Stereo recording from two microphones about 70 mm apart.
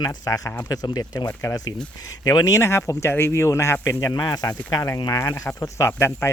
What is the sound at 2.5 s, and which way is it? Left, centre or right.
Speech, left.